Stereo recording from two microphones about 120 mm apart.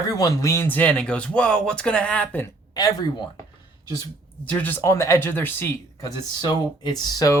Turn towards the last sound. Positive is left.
turn(degrees=30)  # may be behind; listen again after turning